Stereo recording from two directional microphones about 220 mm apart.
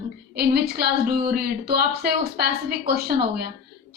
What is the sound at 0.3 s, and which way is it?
Speech, 45° right (ahead or behind).